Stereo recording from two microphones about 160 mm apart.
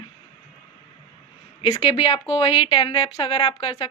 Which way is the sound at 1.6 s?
25° left (ahead or behind).